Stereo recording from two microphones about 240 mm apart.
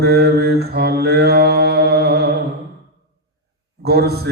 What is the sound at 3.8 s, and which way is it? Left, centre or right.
Speech, right.